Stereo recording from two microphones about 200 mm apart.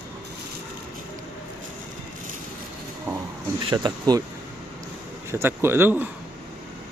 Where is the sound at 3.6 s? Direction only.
20° right (ahead or behind).